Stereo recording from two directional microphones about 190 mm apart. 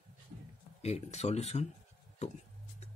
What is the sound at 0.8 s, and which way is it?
Speech, 35° left (ahead or behind).